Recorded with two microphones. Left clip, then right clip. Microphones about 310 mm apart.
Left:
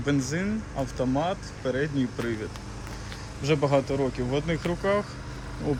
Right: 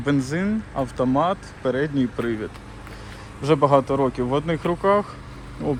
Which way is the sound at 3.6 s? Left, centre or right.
Right.